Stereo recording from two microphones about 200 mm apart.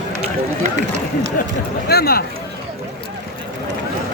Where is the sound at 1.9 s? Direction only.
50° left (ahead or behind).